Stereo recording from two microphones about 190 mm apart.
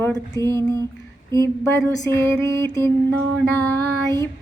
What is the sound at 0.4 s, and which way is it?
Mantra, 15° left (ahead or behind).